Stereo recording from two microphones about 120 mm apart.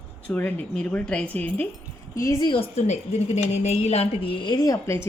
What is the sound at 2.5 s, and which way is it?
A woman's voice, 60° left (ahead or behind).